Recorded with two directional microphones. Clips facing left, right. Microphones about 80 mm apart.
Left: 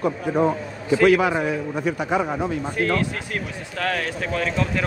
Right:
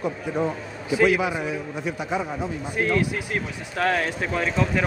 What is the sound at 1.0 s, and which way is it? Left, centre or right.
A man's voice, left.